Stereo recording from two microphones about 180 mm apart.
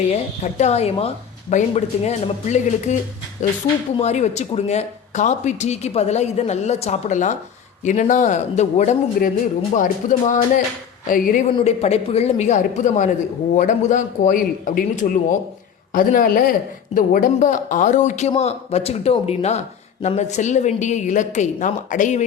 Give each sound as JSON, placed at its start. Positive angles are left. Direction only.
{"t": 0.1, "sound": "a man's voice", "side_deg": 40}
{"t": 11.5, "sound": "a man's voice", "side_deg": 35}